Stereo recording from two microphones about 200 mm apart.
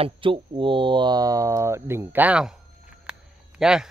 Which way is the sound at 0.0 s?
25° right (ahead or behind).